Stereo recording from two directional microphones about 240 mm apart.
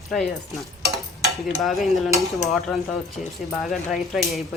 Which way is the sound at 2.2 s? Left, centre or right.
Centre.